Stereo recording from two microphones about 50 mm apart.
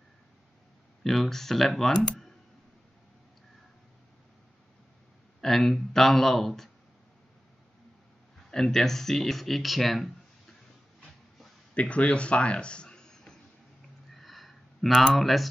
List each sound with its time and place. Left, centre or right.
1.0 s speech: centre
5.4 s speech: centre
8.5 s speech: centre
11.7 s a man's voice: left
14.1 s a sound: centre
15.1 s speech: centre